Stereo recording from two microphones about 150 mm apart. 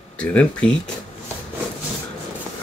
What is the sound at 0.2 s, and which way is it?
Speech, 10° left (ahead or behind).